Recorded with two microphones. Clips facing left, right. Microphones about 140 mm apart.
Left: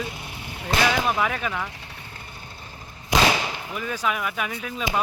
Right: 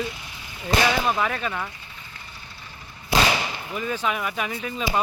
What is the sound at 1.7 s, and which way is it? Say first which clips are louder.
Vehicle: left 3 dB; 70° left (ahead or behind).